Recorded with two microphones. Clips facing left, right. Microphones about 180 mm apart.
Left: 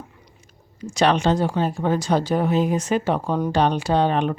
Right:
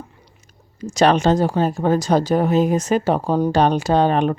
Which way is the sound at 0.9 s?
40° right (ahead or behind).